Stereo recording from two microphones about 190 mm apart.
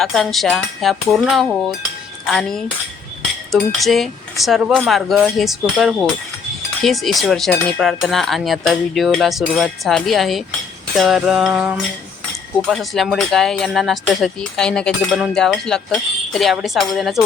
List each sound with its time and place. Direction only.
0.0 s speech: centre (ahead or behind)